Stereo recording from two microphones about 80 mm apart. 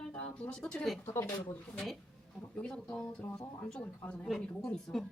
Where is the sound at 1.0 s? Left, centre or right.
Left.